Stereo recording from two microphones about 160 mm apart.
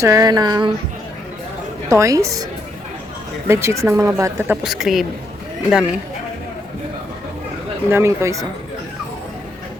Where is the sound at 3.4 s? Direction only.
15° right (ahead or behind).